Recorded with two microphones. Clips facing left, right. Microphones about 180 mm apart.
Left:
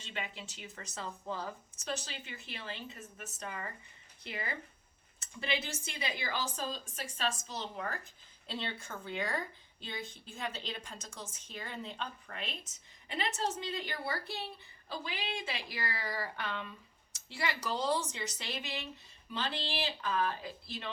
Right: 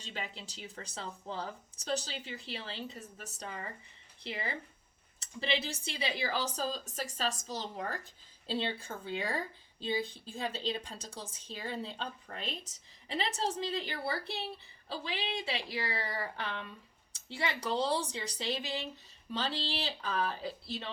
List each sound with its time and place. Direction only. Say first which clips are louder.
0.0 s a woman's voice: even; 35° right (ahead or behind)